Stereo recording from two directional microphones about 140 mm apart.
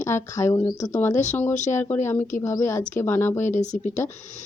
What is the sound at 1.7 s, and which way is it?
Speech, 15° left (ahead or behind).